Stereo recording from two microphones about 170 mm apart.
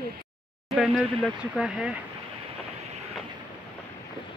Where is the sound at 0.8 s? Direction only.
Centre (ahead or behind).